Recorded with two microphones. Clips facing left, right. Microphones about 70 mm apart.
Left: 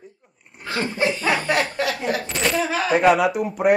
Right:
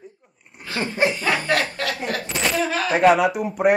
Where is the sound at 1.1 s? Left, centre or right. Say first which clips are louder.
Left 1 dB; left.